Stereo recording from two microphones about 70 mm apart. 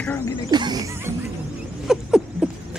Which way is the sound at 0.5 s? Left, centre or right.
Right.